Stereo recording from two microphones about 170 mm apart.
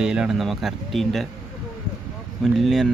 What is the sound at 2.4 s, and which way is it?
Speech, centre (ahead or behind).